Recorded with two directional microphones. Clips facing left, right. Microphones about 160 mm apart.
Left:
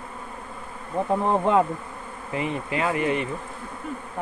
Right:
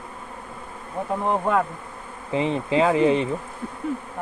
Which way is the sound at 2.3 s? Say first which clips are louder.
Right 6 dB; 25° right (ahead or behind).